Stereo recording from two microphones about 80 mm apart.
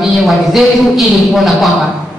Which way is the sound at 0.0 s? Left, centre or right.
Centre.